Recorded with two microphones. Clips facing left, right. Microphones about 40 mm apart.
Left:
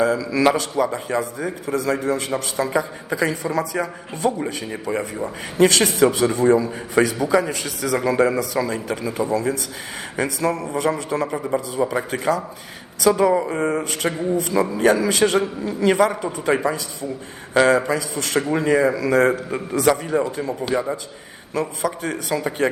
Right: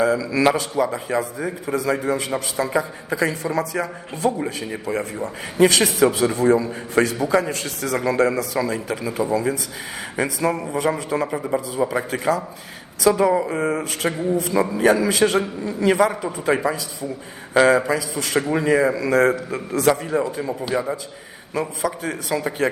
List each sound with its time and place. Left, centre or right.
0.2 s a man's voice: centre
1.7 s a man's voice: centre
9.3 s a man's voice: centre
11.3 s a man's voice: centre